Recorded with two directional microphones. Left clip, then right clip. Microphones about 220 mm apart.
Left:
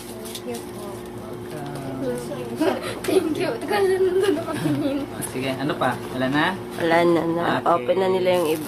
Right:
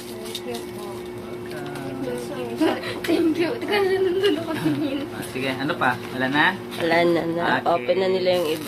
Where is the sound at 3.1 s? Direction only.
55° left (ahead or behind).